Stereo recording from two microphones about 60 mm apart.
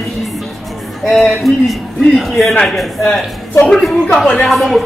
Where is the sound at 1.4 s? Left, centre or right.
Centre.